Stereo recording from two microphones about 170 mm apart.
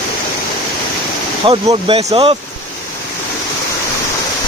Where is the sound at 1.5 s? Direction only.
30° right (ahead or behind).